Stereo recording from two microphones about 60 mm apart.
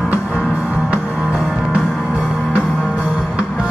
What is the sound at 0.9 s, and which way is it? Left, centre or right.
Music, right.